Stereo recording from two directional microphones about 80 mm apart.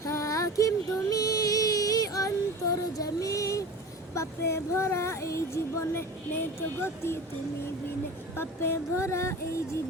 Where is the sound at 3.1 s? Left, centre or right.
Left.